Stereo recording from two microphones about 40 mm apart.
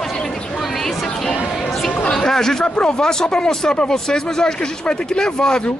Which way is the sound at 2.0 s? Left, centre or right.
Centre.